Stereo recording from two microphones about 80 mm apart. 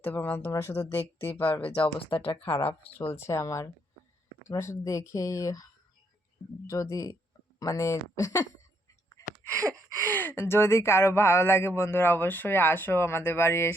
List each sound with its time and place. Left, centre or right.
0.0 s speech: left
2.0 s speech: left
2.6 s speech: left
6.7 s speech: left
9.2 s a sound: left
10.1 s speech: left